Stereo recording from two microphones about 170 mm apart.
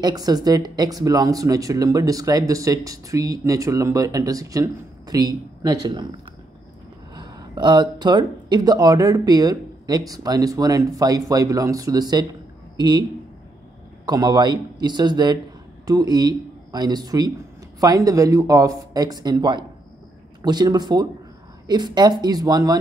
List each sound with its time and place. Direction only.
0.0 s speech: 25° right (ahead or behind)
14.0 s speech: 25° right (ahead or behind)